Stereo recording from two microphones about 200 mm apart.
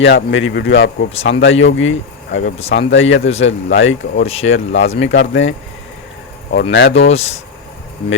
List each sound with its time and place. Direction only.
0.0 s speech: 70° left (ahead or behind)
7.1 s speech: 30° left (ahead or behind)